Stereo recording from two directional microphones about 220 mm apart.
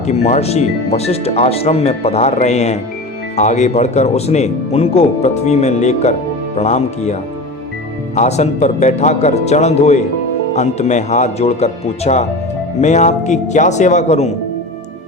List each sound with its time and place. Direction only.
0.1 s speech: 30° left (ahead or behind)